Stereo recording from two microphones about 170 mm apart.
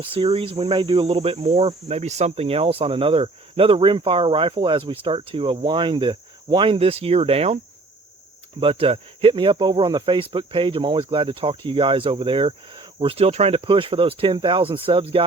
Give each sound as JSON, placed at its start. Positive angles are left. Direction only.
{"t": 0.0, "sound": "speech", "side_deg": -30}
{"t": 8.6, "sound": "speech", "side_deg": -35}